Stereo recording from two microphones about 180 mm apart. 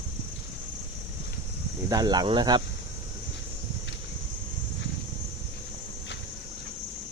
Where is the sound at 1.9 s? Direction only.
20° right (ahead or behind).